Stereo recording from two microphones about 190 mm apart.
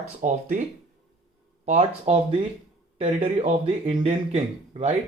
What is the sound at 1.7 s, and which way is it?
Speech, 35° right (ahead or behind).